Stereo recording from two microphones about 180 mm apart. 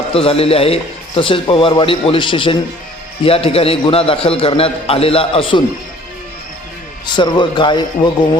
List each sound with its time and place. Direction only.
0.1 s a man's voice: 30° left (ahead or behind)
7.0 s a man's voice: 25° left (ahead or behind)